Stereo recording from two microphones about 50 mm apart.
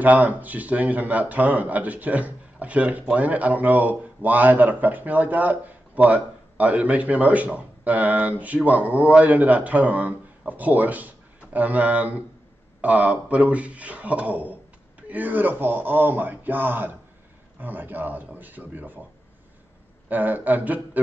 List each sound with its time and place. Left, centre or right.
0.0 s speech: right
20.1 s speech: right